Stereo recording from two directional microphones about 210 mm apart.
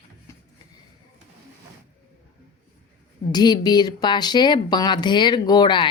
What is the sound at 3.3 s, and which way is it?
Speech, 20° left (ahead or behind).